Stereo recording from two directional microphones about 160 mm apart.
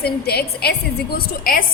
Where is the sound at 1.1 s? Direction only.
65° left (ahead or behind).